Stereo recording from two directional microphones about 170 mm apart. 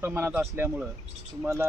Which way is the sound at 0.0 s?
15° right (ahead or behind).